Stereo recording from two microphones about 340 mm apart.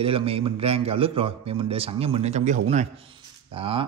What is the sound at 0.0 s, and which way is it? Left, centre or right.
A man's voice, centre.